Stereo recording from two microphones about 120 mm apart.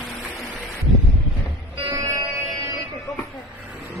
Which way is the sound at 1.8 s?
30° right (ahead or behind).